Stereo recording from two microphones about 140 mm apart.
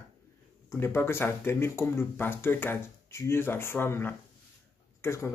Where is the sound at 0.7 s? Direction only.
15° left (ahead or behind).